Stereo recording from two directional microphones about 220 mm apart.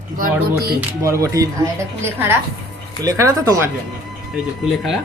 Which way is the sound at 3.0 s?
15° right (ahead or behind).